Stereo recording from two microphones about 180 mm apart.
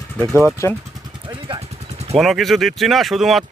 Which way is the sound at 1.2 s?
25° right (ahead or behind).